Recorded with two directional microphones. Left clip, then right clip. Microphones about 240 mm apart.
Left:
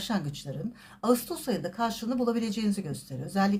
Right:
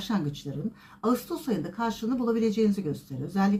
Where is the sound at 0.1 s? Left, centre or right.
Left.